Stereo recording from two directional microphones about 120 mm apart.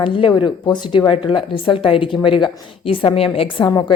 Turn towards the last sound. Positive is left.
turn(degrees=40)  # may be behind; listen again after turning